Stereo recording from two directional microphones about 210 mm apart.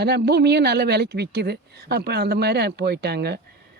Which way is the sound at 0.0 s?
50° right (ahead or behind).